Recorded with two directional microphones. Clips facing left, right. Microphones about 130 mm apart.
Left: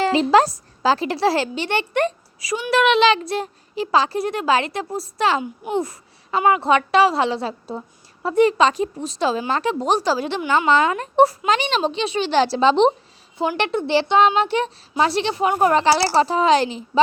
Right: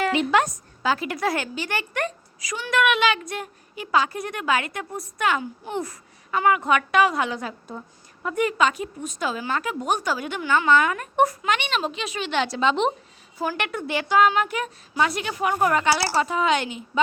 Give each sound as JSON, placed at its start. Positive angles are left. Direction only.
{"t": 0.0, "sound": "a woman's voice", "side_deg": 30}